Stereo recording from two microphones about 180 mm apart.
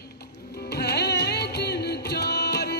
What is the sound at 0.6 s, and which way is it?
Music, 65° left (ahead or behind).